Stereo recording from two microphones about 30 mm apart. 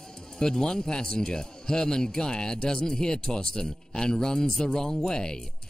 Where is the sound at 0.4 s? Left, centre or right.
Left.